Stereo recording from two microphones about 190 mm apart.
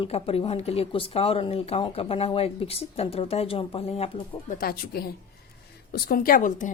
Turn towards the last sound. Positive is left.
turn(degrees=45)  # may be behind; listen again after turning